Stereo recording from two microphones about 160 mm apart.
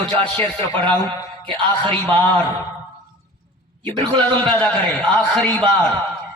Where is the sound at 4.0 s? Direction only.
30° right (ahead or behind).